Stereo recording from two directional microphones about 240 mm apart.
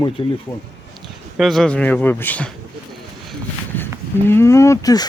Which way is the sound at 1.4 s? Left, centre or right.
Centre.